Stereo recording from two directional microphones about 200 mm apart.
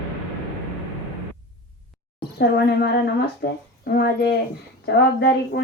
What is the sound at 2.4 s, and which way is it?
A woman's voice, 50° left (ahead or behind).